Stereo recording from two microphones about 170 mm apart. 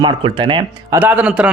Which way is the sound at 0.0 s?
30° right (ahead or behind).